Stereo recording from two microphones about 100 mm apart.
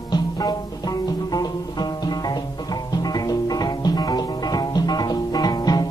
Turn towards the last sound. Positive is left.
turn(degrees=40)  # may be behind; listen again after turning